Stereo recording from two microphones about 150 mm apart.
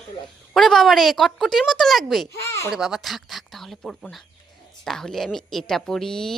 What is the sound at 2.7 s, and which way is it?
A woman's voice, 5° right (ahead or behind).